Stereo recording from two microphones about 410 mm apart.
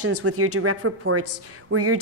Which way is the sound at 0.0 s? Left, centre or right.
Right.